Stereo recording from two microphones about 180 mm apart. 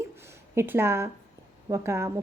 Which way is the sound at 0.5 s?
15° right (ahead or behind).